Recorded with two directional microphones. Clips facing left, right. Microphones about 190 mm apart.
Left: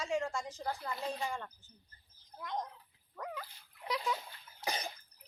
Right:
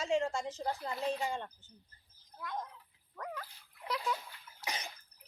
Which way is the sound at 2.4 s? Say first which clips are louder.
Left 2 dB; 20° left (ahead or behind).